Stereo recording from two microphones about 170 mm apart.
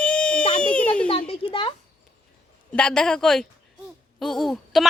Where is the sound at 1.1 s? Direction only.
30° left (ahead or behind).